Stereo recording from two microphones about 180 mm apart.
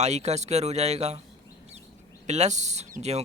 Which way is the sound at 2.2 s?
40° right (ahead or behind).